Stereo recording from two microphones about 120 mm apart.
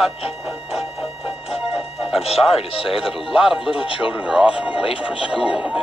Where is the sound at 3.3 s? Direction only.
5° right (ahead or behind).